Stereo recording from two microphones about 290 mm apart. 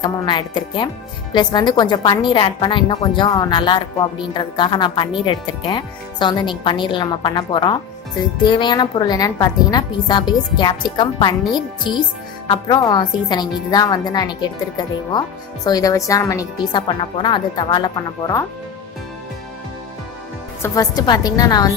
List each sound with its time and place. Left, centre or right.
0.0 s a woman's voice: centre
20.6 s a woman's voice: centre